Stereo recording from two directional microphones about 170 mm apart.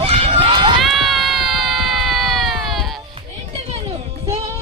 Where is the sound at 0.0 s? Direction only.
35° right (ahead or behind).